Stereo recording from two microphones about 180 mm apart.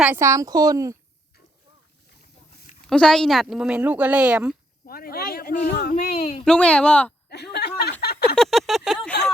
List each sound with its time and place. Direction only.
0.0 s speech: 15° right (ahead or behind)
2.9 s speech: 5° left (ahead or behind)
4.9 s speech: 55° left (ahead or behind)
6.4 s speech: 5° left (ahead or behind)
7.3 s speech: 65° left (ahead or behind)
8.0 s a sound: 65° left (ahead or behind)
8.4 s a sound: centre (ahead or behind)